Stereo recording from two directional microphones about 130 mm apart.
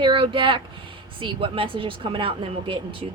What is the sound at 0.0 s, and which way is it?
A woman's voice, 40° right (ahead or behind).